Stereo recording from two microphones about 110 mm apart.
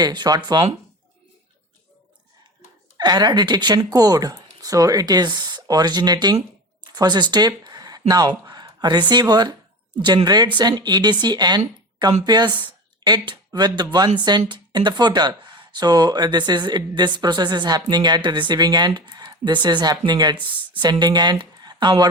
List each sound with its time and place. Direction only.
0.0 s speech: 40° right (ahead or behind)
3.0 s speech: 40° right (ahead or behind)